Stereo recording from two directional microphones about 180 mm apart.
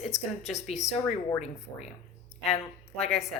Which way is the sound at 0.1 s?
Centre (ahead or behind).